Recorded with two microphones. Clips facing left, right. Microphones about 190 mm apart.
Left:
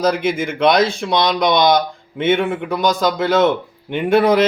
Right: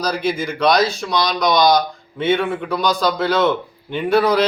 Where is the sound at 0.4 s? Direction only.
25° left (ahead or behind).